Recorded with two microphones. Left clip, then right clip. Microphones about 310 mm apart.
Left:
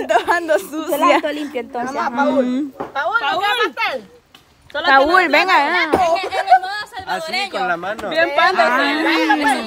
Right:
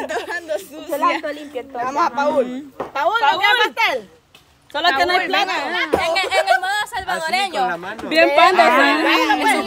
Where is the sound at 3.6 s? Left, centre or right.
Right.